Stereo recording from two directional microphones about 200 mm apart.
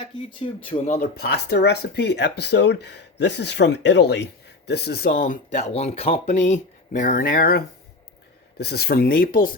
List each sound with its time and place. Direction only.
0.0 s speech: 25° left (ahead or behind)
1.1 s speech: 55° left (ahead or behind)